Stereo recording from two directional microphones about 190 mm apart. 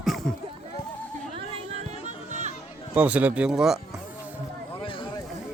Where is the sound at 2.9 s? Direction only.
5° right (ahead or behind).